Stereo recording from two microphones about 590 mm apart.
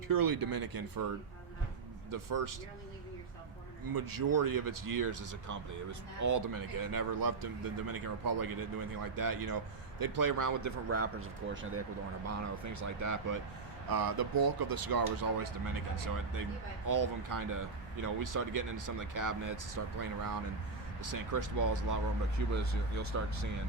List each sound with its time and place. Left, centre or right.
0.1 s speech: right
2.0 s speech: right
3.9 s speech: right